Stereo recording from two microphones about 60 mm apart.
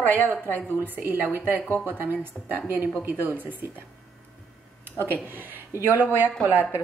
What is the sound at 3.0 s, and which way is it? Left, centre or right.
Speech, right.